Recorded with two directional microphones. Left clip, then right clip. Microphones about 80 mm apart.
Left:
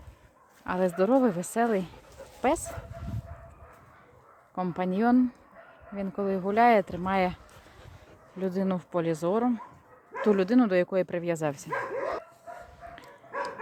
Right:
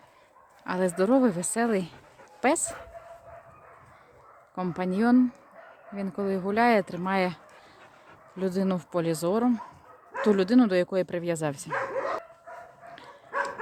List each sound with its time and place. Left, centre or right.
0.6 s speech: right
2.4 s speech: right
4.5 s speech: centre
8.4 s speech: right
10.2 s speech: centre